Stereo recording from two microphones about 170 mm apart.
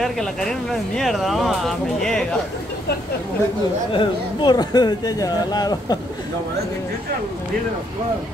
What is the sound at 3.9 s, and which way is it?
Speech, 25° left (ahead or behind).